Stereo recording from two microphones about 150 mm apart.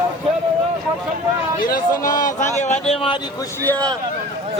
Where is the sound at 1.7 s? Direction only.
60° left (ahead or behind); by 3.2 s 35° left (ahead or behind).